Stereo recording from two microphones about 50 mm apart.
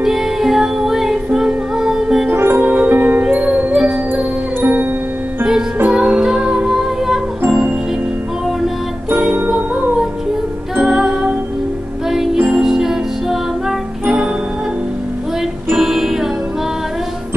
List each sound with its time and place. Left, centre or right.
0.0 s music: centre
2.3 s music: right
2.6 s music: right
4.6 s music: right
5.9 s music: centre
9.1 s music: right
10.8 s music: centre
12.4 s music: right
12.6 s music: centre
15.7 s music: centre